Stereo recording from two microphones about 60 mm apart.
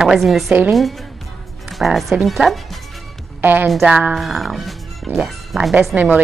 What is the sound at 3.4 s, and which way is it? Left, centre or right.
Speech, right.